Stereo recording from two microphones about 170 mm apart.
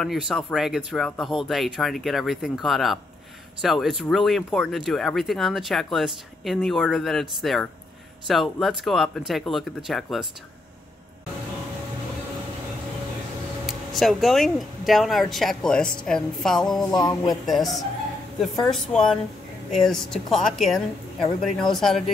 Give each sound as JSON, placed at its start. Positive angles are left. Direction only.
{"t": 0.0, "sound": "speech", "side_deg": 0}
{"t": 13.7, "sound": "speech", "side_deg": 0}
{"t": 16.9, "sound": "music", "side_deg": 20}
{"t": 17.5, "sound": "speech", "side_deg": 0}